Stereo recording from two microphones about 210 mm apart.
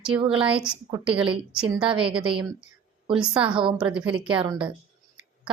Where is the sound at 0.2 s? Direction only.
25° right (ahead or behind).